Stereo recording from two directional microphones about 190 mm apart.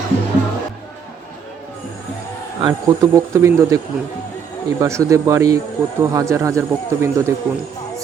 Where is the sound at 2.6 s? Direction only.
20° right (ahead or behind).